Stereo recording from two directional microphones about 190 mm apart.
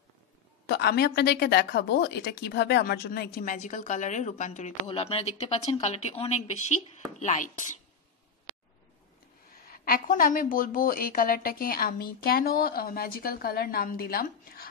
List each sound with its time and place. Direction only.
0.7 s a woman's voice: 60° left (ahead or behind); by 7.5 s 40° left (ahead or behind)
9.7 s a woman's voice: 50° left (ahead or behind)